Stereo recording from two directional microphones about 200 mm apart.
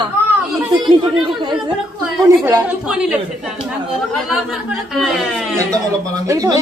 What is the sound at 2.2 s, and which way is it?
Speech, 15° right (ahead or behind).